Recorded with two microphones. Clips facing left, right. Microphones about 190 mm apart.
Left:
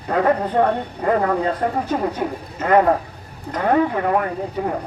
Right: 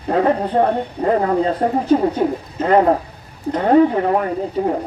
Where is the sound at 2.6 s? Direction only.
25° right (ahead or behind).